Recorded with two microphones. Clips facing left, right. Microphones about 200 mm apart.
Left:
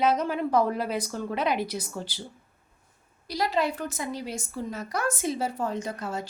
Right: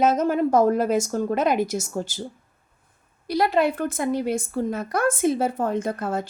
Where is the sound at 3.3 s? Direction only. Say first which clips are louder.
Right 6 dB; 55° right (ahead or behind).